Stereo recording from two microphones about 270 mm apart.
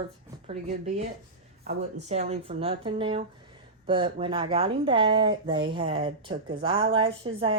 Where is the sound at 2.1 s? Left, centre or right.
Right.